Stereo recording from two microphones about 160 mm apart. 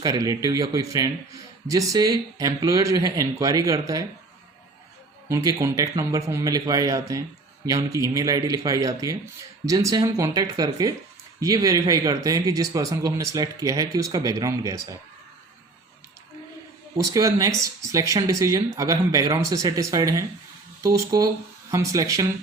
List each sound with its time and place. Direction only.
0.0 s a man's voice: 20° right (ahead or behind)
5.3 s a man's voice: 20° right (ahead or behind)
17.1 s a man's voice: 20° right (ahead or behind)